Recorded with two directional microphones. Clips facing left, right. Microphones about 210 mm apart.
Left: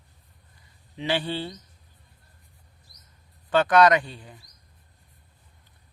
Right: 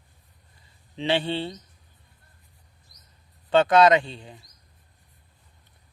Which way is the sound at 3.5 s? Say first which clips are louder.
Right 1 dB; 25° right (ahead or behind).